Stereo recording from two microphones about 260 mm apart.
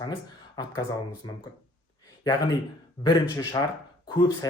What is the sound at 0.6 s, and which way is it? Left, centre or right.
Speech, centre.